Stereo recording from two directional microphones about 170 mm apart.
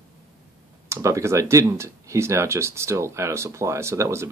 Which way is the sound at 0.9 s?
15° right (ahead or behind).